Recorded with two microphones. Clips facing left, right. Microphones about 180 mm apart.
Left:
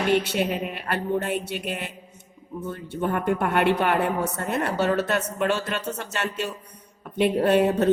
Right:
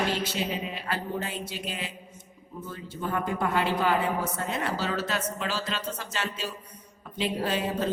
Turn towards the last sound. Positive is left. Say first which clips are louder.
# left 9 dB
turn(degrees=65)  # may be behind; listen again after turning